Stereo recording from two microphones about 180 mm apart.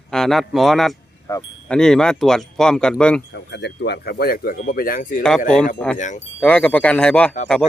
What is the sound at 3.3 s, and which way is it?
Speech, 70° left (ahead or behind).